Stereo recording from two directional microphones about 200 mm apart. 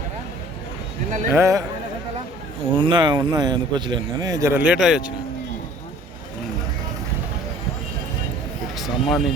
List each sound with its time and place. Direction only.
1.3 s speech: 15° right (ahead or behind)
2.7 s speech: 25° right (ahead or behind); by 5.1 s 5° right (ahead or behind)
8.7 s speech: centre (ahead or behind)